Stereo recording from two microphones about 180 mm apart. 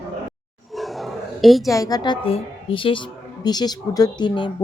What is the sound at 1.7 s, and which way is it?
Speech, 20° left (ahead or behind).